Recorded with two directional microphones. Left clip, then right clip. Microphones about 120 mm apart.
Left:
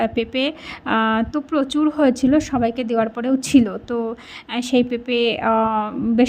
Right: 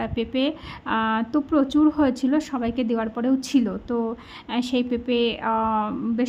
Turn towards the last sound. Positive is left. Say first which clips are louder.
# left 6 dB
turn(degrees=25)  # may be behind; listen again after turning